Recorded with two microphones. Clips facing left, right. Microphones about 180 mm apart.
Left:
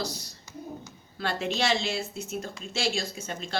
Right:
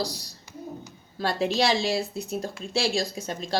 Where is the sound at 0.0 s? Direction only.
35° right (ahead or behind).